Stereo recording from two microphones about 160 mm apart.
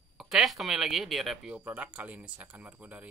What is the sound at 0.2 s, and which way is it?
Speech, centre (ahead or behind).